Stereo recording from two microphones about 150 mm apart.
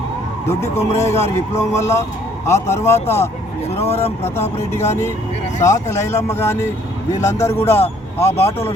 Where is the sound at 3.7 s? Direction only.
45° left (ahead or behind).